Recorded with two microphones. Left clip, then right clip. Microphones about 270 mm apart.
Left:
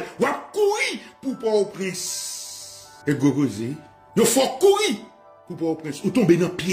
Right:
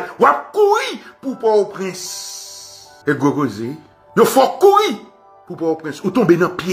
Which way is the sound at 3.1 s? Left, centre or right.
Centre.